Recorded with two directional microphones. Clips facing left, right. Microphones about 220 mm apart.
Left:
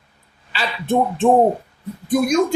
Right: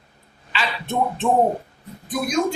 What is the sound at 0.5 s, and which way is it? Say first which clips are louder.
Speech: left 6 dB; 30° left (ahead or behind).